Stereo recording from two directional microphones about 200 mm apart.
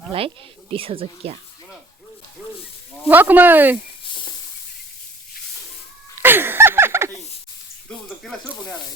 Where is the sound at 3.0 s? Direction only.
10° right (ahead or behind).